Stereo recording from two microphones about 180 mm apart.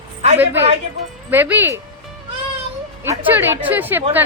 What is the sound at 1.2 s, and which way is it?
Speech, 10° right (ahead or behind).